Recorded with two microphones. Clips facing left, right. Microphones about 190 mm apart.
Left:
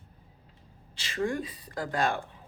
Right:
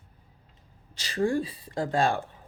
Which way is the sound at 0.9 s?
35° right (ahead or behind).